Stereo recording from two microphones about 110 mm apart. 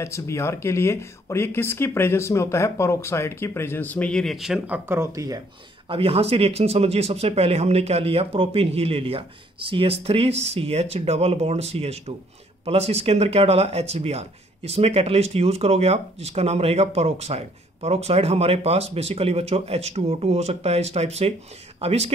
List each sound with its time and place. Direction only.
0.0 s speech: 25° left (ahead or behind); by 5.4 s 30° right (ahead or behind)
5.9 s speech: 55° right (ahead or behind)